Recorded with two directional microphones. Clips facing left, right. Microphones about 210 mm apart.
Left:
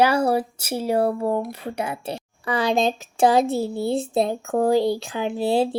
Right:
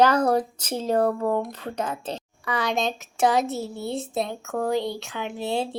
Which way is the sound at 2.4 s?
30° left (ahead or behind).